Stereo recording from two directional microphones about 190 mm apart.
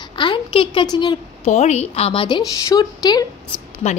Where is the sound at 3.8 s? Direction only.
35° left (ahead or behind).